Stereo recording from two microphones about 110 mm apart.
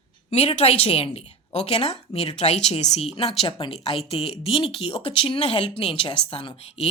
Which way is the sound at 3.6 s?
55° left (ahead or behind).